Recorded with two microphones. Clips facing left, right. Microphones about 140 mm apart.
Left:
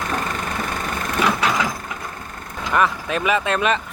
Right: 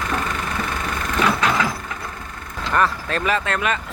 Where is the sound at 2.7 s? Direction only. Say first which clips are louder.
Left 1 dB; 15° left (ahead or behind).